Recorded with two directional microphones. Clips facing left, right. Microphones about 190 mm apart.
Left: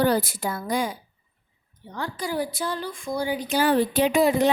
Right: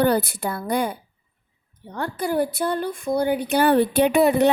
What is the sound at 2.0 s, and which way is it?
A woman's voice, 55° right (ahead or behind).